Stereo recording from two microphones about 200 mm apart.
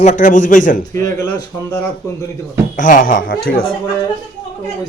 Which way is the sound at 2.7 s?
40° left (ahead or behind).